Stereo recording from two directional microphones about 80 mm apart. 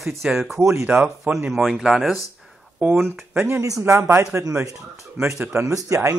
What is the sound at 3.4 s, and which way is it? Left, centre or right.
Speech, right.